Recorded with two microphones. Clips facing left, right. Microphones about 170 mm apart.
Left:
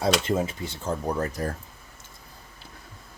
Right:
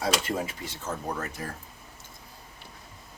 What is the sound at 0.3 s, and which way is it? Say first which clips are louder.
Speech: left 5 dB; 25° left (ahead or behind).